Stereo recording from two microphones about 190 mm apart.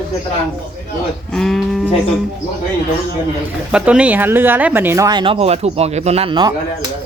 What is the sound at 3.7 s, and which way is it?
Speech, 5° right (ahead or behind).